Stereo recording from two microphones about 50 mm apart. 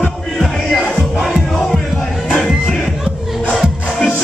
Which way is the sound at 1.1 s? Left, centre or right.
Centre.